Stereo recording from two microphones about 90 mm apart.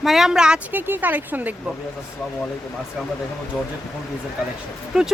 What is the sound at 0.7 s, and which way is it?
Speech, 20° right (ahead or behind).